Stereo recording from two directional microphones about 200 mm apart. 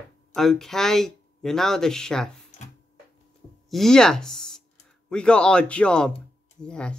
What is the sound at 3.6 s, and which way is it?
Speech, centre (ahead or behind).